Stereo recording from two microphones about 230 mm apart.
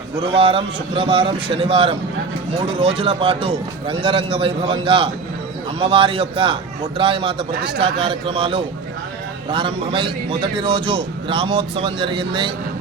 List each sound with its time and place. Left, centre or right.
0.2 s a man's voice: right